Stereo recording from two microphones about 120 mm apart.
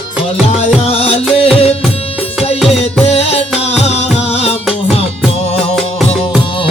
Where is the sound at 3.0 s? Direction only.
60° left (ahead or behind).